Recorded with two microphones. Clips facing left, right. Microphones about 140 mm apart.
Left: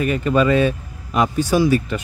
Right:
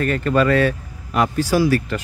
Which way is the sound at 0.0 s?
15° left (ahead or behind).